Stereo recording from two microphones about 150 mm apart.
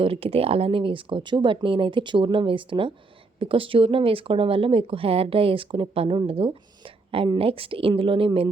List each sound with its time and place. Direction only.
0.0 s speech: 40° right (ahead or behind)